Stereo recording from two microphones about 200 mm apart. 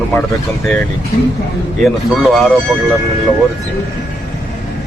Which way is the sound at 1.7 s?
Centre (ahead or behind).